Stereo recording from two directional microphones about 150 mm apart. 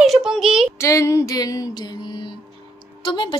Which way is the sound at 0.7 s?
20° left (ahead or behind).